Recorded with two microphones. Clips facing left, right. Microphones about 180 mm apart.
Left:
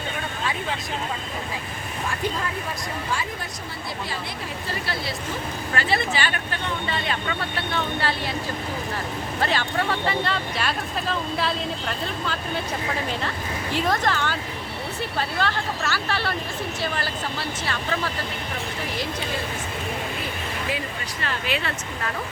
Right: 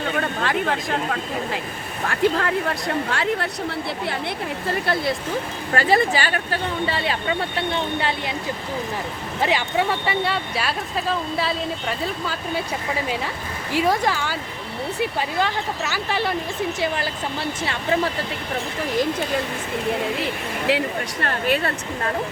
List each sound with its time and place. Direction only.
0.2 s speech: 65° right (ahead or behind)
4.7 s speech: 55° right (ahead or behind)
5.7 s speech: 40° right (ahead or behind); by 8.4 s 20° right (ahead or behind)
9.4 s speech: 15° right (ahead or behind)
13.7 s speech: 10° right (ahead or behind)
20.7 s speech: 75° right (ahead or behind); by 21.7 s 50° right (ahead or behind)